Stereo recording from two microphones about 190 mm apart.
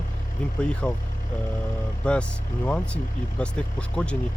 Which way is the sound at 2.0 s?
5° left (ahead or behind).